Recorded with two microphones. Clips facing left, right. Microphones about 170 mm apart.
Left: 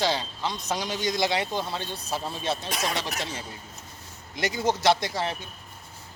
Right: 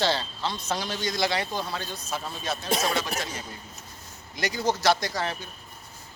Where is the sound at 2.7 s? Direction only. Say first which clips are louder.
Right 4 dB; 30° right (ahead or behind).